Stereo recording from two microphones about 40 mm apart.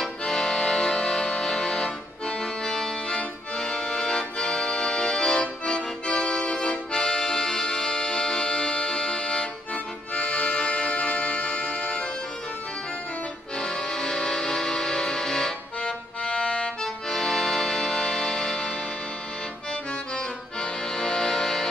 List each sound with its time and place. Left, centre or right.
0.0 s accordion: centre
10.1 s music: left
13.6 s music: left
16.3 s music: left
16.8 s accordion: centre
20.2 s accordion: left